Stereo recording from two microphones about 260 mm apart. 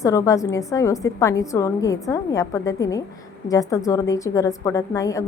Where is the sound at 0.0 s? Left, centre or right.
Centre.